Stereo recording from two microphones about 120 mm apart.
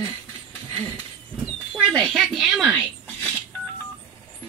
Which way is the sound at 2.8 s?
10° right (ahead or behind).